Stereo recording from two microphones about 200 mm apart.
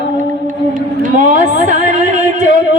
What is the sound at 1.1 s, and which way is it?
Speech, 40° right (ahead or behind).